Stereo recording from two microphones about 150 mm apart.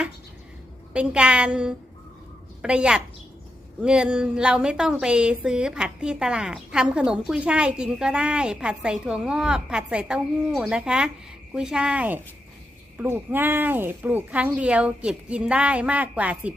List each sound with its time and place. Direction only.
0.9 s speech: 5° right (ahead or behind)